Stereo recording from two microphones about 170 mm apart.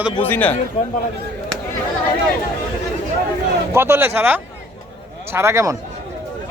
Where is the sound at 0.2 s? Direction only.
10° left (ahead or behind).